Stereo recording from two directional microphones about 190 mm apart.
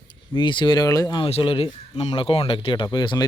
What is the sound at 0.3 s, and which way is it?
Speech, 25° left (ahead or behind).